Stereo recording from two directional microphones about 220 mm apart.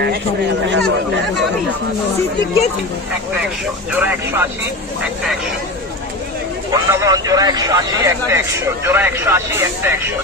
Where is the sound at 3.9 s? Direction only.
5° right (ahead or behind).